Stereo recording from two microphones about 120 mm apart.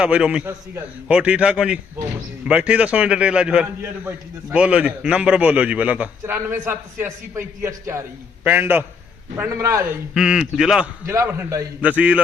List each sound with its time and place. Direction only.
0.0 s a man's voice: 10° right (ahead or behind)
10.2 s speech: 5° right (ahead or behind)
11.0 s a man's voice: 20° right (ahead or behind)